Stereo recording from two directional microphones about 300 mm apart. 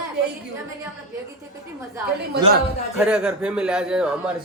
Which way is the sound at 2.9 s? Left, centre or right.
Centre.